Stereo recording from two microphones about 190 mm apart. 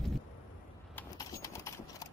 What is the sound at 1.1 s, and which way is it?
Clip-clop, 15° left (ahead or behind).